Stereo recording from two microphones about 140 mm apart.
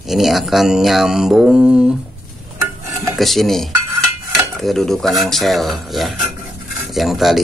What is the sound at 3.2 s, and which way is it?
Speech, centre (ahead or behind).